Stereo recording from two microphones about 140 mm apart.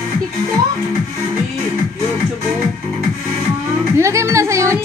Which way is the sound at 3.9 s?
20° right (ahead or behind).